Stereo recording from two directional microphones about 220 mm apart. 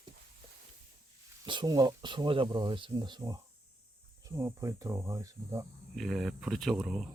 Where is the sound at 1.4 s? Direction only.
20° right (ahead or behind).